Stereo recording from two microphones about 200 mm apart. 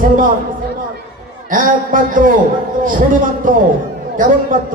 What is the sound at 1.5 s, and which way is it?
Music, 40° right (ahead or behind).